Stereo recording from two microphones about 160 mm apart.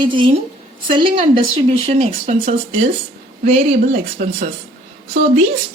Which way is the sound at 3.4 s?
40° right (ahead or behind).